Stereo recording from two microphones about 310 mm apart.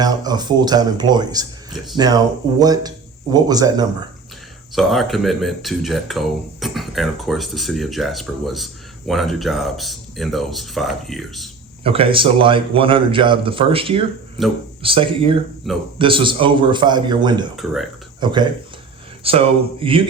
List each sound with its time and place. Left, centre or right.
0.0 s a man's voice: centre
4.7 s speech: centre
11.8 s a man's voice: centre
15.6 s speech: centre
16.0 s a man's voice: centre
17.6 s speech: centre
18.2 s a man's voice: centre